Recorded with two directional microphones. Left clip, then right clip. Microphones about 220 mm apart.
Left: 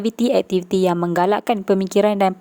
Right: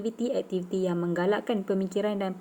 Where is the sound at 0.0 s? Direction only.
50° left (ahead or behind).